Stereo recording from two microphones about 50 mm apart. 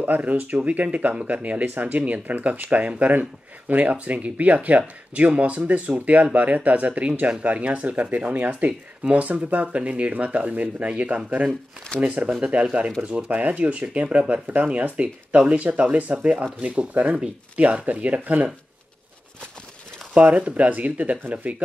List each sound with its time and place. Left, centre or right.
0.0 s speech: right
20.2 s speech: right